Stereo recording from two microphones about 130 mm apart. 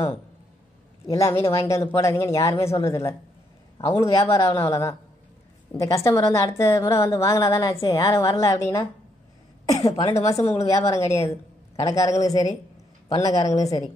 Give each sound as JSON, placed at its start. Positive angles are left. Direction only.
{"t": 1.1, "sound": "a woman's voice", "side_deg": 20}
{"t": 3.7, "sound": "a man's voice", "side_deg": 40}
{"t": 4.0, "sound": "a woman's voice", "side_deg": 20}